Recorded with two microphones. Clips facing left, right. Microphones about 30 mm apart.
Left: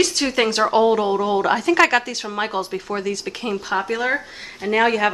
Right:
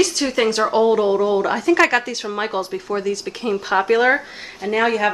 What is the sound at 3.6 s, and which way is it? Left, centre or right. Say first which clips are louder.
Speech: right 7 dB; centre.